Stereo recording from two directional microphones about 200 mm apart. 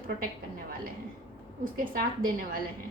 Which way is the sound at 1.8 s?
45° right (ahead or behind).